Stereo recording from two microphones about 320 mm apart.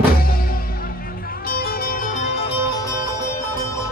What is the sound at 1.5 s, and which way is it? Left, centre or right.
Music, left.